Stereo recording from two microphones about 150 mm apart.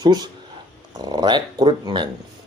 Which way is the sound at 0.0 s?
30° right (ahead or behind).